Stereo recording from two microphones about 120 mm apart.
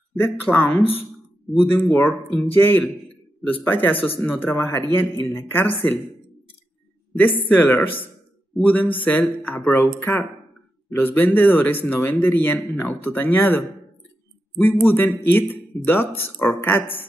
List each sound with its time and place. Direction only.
0.2 s a man's voice: 15° left (ahead or behind)
7.2 s a man's voice: 15° left (ahead or behind)
10.9 s a man's voice: 15° left (ahead or behind)